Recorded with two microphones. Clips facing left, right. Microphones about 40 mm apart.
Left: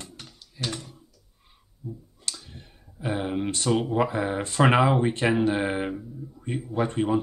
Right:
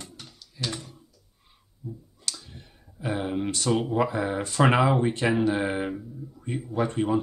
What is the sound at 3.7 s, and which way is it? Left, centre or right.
Speech, centre.